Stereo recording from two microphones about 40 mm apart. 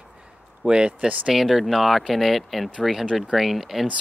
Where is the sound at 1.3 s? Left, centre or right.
Centre.